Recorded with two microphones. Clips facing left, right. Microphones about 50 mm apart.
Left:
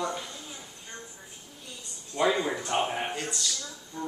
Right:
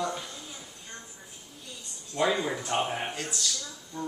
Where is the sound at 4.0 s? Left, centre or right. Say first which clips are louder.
Even; centre.